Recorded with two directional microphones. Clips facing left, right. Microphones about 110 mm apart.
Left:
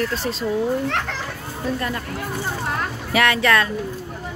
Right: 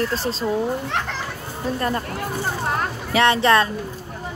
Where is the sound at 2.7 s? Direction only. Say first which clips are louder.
Even; 30° right (ahead or behind).